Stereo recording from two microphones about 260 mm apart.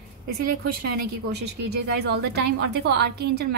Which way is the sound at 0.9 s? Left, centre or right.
Right.